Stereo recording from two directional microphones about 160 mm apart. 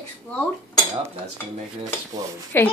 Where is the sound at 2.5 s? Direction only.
15° left (ahead or behind).